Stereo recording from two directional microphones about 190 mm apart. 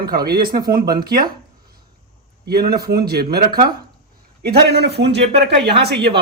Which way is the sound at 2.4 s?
55° right (ahead or behind).